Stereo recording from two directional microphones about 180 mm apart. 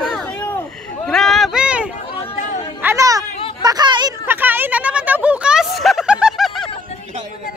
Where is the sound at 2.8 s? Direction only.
15° right (ahead or behind).